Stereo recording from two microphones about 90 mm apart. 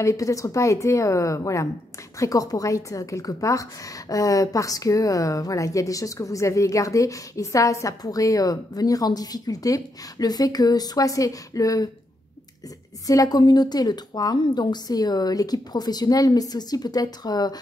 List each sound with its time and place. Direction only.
0.0 s a woman's voice: 35° left (ahead or behind)
13.0 s a woman's voice: 40° left (ahead or behind)